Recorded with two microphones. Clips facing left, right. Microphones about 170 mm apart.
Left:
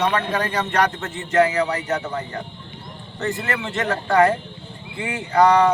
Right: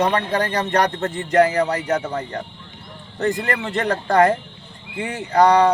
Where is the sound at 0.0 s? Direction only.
35° right (ahead or behind).